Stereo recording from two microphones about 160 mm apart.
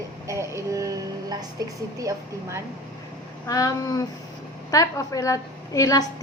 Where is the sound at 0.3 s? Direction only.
20° right (ahead or behind).